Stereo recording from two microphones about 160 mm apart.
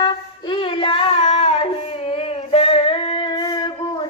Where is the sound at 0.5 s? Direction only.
35° left (ahead or behind).